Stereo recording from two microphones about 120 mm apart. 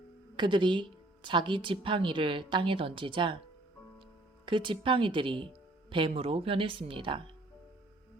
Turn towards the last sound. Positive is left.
turn(degrees=-45)  # may be behind; listen again after turning